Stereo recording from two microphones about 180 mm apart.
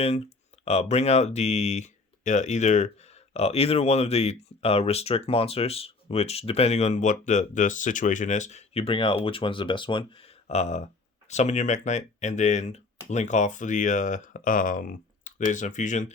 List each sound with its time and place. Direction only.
0.6 s speech: 35° left (ahead or behind)